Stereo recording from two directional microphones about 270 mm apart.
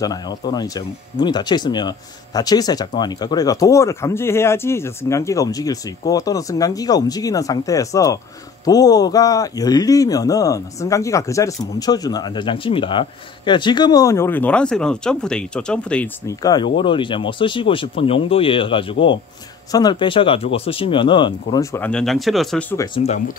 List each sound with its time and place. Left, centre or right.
0.0 s a man's voice: centre
22.9 s speech: left